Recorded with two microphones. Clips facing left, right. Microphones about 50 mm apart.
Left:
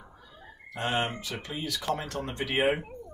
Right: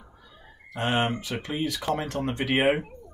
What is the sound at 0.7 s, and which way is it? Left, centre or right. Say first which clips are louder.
Speech: right 4 dB; right.